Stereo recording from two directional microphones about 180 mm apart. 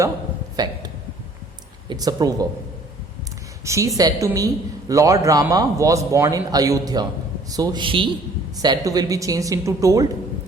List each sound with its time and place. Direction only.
0.5 s a man's voice: 20° right (ahead or behind)
1.9 s a woman's voice: 20° right (ahead or behind)
3.6 s a woman's voice: 15° right (ahead or behind)